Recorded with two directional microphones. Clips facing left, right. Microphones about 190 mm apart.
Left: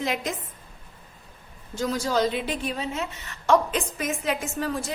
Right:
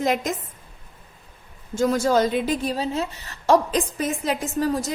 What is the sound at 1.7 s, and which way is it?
A woman's voice, 50° right (ahead or behind).